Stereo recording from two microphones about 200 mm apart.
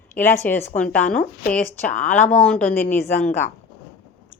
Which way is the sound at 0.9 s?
45° left (ahead or behind).